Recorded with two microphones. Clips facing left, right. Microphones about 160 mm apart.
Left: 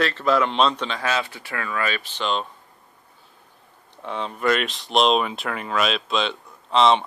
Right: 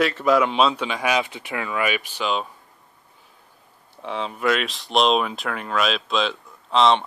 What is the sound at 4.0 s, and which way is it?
Speech, centre (ahead or behind).